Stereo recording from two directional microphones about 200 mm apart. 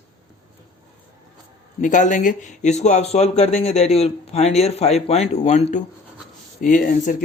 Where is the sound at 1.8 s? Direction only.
40° left (ahead or behind).